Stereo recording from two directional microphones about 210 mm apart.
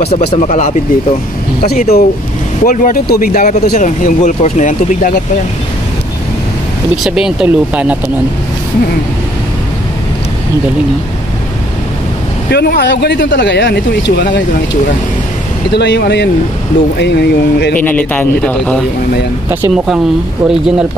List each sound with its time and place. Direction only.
0.4 s speech: 35° left (ahead or behind)
7.0 s speech: 5° right (ahead or behind)
12.4 s speech: 50° left (ahead or behind)
15.7 s speech: 55° left (ahead or behind)
17.7 s speech: 5° left (ahead or behind)
19.5 s speech: 5° right (ahead or behind)